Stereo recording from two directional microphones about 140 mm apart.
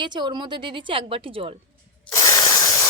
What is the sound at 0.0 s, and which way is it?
A woman's voice, 35° right (ahead or behind).